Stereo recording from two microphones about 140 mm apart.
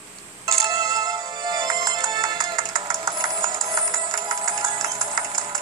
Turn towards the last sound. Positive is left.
turn(degrees=-25)  # may be behind; listen again after turning